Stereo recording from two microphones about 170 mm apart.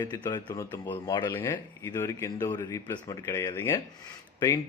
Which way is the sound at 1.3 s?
15° left (ahead or behind).